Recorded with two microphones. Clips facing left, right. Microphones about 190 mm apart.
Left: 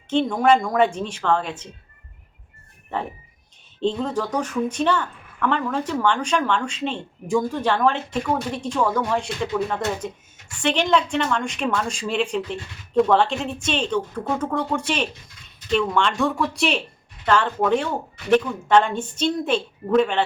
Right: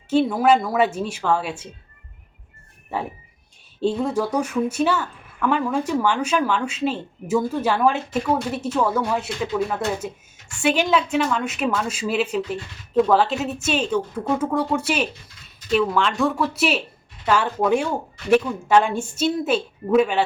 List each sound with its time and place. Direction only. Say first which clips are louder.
0.1 s a woman's voice: right 1 dB; 5° right (ahead or behind)
2.9 s a woman's voice: even; 10° right (ahead or behind)